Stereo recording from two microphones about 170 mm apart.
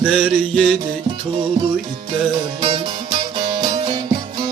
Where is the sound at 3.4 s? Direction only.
30° right (ahead or behind).